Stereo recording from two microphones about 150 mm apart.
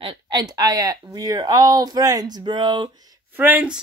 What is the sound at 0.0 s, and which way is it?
Speech, 30° right (ahead or behind).